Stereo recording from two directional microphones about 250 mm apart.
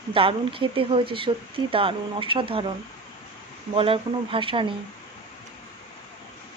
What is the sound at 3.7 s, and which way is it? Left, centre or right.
Speech, right.